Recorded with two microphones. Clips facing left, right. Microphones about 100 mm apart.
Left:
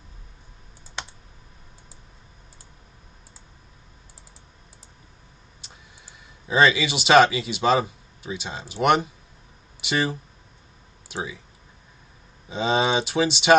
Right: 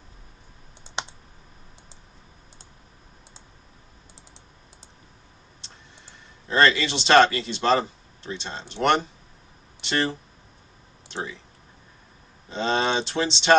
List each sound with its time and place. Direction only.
1.0 s computer keyboard: 25° right (ahead or behind)
6.4 s speech: 10° left (ahead or behind)
12.4 s speech: 10° left (ahead or behind)